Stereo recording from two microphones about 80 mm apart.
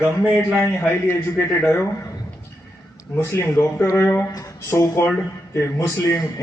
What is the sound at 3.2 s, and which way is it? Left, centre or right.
A man's voice, left.